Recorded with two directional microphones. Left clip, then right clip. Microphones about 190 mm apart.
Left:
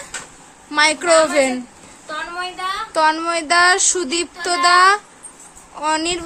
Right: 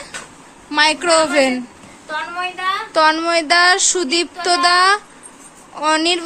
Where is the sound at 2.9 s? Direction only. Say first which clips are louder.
Right 3 dB; 10° left (ahead or behind).